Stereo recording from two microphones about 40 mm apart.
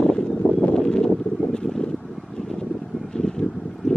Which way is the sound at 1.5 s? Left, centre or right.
Centre.